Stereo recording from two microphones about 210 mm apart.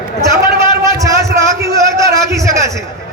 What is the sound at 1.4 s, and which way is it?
Speech, 15° right (ahead or behind).